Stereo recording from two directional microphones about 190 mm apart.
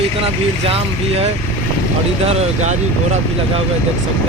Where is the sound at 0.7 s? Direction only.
30° right (ahead or behind).